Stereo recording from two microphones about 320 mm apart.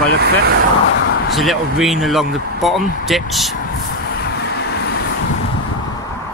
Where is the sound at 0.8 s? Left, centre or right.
Left.